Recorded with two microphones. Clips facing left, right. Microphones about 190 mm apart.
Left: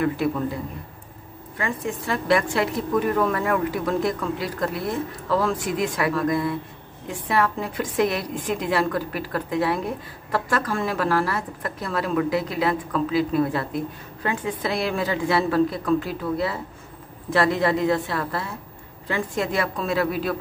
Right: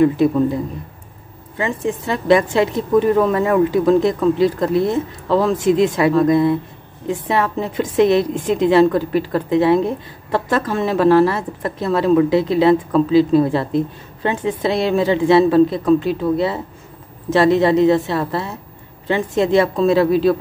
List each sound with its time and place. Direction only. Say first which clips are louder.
1.6 s a woman's voice: right 7 dB; 25° right (ahead or behind)